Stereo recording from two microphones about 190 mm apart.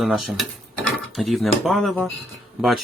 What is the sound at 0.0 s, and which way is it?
Speech, centre (ahead or behind).